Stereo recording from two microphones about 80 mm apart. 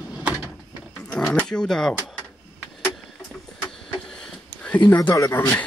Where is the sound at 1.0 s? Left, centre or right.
Centre.